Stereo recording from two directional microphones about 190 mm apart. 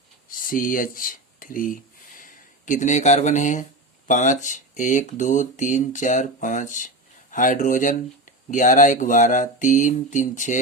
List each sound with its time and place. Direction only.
0.3 s speech: 45° left (ahead or behind)